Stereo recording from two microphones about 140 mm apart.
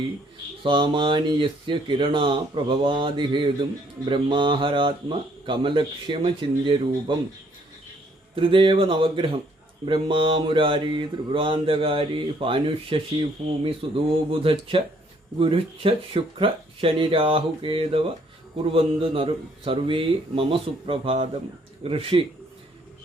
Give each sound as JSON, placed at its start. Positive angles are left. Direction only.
{"t": 0.6, "sound": "mantra", "side_deg": -35}
{"t": 8.4, "sound": "mantra", "side_deg": -35}